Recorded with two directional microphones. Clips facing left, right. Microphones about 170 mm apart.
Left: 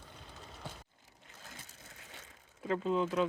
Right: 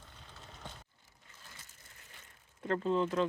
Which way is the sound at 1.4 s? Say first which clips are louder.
Left 6 dB; 90° left.